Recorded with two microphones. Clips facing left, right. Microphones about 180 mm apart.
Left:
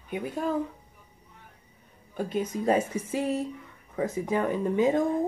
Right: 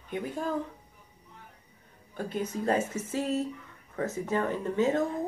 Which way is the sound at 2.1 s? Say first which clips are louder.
Left 3 dB; 10° left (ahead or behind).